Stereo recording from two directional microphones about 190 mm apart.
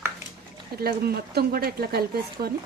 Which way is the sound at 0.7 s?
55° right (ahead or behind).